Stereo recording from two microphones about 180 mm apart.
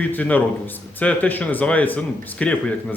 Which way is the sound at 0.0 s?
10° left (ahead or behind).